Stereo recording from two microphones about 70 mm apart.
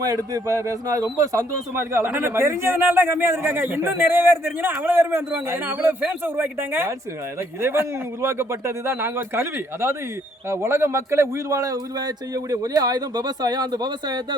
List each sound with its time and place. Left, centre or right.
0.0 s speech: right
1.7 s a man's voice: right